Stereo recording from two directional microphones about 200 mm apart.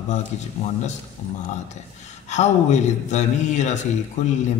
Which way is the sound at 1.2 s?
35° left (ahead or behind).